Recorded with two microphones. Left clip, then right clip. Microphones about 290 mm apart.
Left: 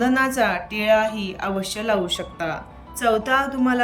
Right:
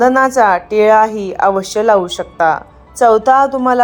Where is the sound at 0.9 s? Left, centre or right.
Right.